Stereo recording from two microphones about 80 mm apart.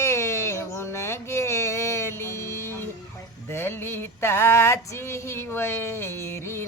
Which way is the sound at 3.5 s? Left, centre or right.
Left.